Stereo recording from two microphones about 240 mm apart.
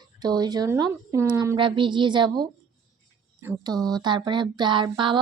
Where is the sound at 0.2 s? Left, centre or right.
Centre.